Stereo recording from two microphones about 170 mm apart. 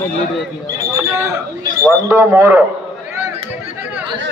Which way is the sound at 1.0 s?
15° right (ahead or behind).